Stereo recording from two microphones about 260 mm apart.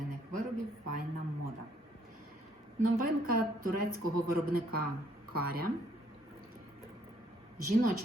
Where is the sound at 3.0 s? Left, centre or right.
Right.